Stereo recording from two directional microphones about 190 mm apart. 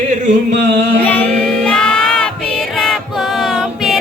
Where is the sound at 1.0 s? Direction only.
10° left (ahead or behind).